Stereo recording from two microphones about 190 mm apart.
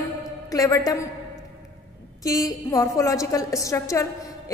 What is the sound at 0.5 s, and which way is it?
Speech, 20° left (ahead or behind).